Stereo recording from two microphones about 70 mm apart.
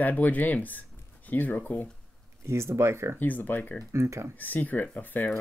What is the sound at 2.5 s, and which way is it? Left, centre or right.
Speech, right.